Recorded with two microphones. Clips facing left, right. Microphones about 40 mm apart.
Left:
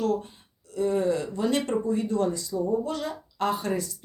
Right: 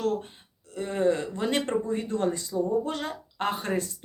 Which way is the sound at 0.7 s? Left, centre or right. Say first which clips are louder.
Left 1 dB; right.